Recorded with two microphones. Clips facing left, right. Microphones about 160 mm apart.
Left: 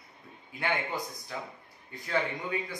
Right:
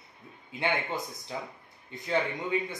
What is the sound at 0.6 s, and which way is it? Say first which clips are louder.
Speech: right 1 dB; 20° right (ahead or behind).